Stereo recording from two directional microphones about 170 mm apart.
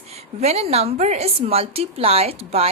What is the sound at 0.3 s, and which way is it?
A woman's voice, 40° right (ahead or behind).